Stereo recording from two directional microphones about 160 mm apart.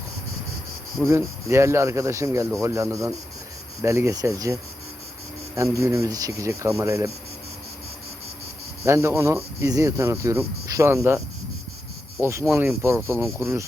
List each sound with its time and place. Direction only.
1.0 s speech: 15° right (ahead or behind)
5.5 s speech: 20° right (ahead or behind)
8.8 s speech: 15° right (ahead or behind)
12.2 s speech: 15° right (ahead or behind)